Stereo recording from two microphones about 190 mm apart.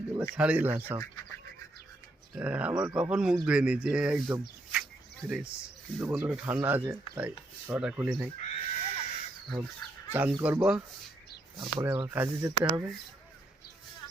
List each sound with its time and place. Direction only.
0.1 s speech: 10° right (ahead or behind)
2.3 s speech: 5° right (ahead or behind)
8.4 s neigh: 40° left (ahead or behind)
10.1 s speech: 10° right (ahead or behind)
11.6 s speech: 20° right (ahead or behind)